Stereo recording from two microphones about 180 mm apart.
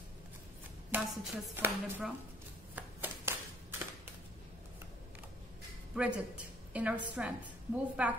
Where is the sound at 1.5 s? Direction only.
10° right (ahead or behind).